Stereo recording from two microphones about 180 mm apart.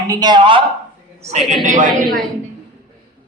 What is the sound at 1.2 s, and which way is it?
Speech, 40° right (ahead or behind).